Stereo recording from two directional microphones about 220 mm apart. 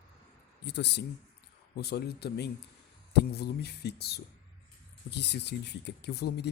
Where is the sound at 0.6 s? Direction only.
50° left (ahead or behind).